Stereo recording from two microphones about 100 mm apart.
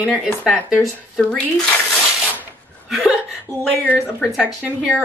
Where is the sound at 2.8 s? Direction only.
5° right (ahead or behind).